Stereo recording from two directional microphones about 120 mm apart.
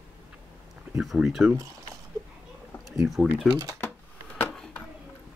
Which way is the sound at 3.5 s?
35° right (ahead or behind).